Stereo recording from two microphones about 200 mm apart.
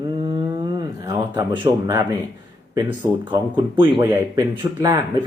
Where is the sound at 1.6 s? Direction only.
15° right (ahead or behind).